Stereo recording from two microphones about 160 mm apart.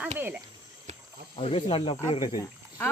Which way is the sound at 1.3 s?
35° left (ahead or behind).